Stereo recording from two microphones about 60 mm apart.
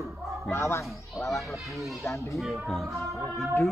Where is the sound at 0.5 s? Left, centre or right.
Left.